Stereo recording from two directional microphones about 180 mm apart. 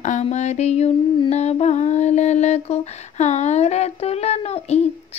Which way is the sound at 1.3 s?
40° left (ahead or behind).